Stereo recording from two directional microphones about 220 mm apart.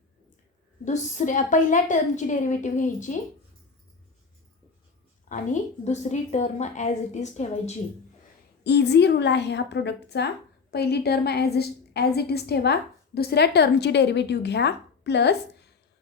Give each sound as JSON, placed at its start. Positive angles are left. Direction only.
{"t": 0.9, "sound": "a woman's voice", "side_deg": 35}
{"t": 5.3, "sound": "a woman's voice", "side_deg": 30}
{"t": 8.6, "sound": "a woman's voice", "side_deg": 50}